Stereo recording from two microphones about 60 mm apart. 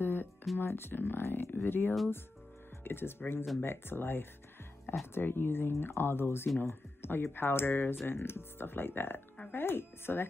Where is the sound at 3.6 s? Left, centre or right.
Left.